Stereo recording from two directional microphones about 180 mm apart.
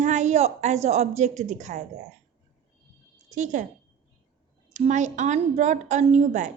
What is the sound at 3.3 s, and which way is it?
Speech, 45° right (ahead or behind).